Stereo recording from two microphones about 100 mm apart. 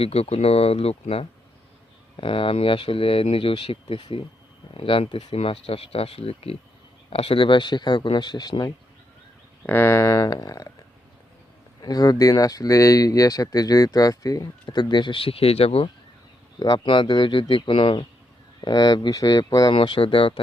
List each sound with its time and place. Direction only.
0.0 s speech: 90° left
2.1 s speech: 65° left (ahead or behind); by 6.6 s 80° left
7.1 s speech: 70° left (ahead or behind); by 8.7 s 40° left (ahead or behind)
9.6 s speech: 25° left (ahead or behind)
11.8 s speech: 40° left (ahead or behind); by 15.9 s 75° left (ahead or behind)
16.6 s speech: 40° left (ahead or behind)
16.8 s speech: 55° left (ahead or behind)
18.6 s speech: 40° left (ahead or behind)
19.7 s speech: 55° left (ahead or behind)